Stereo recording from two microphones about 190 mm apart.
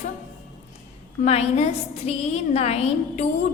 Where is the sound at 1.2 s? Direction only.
35° left (ahead or behind).